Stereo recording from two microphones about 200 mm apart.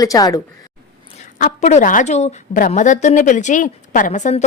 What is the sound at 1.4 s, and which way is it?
A woman's voice, 40° left (ahead or behind).